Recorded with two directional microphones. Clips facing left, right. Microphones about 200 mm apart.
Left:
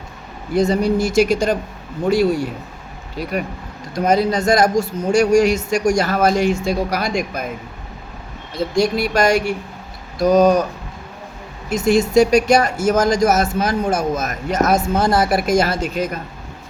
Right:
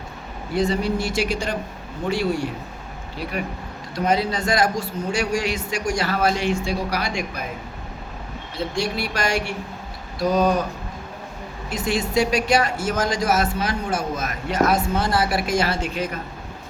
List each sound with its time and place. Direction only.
0.5 s speech: 40° left (ahead or behind)
3.9 s speech: 45° left (ahead or behind)
8.7 s speech: 40° left (ahead or behind)
11.7 s speech: 45° left (ahead or behind)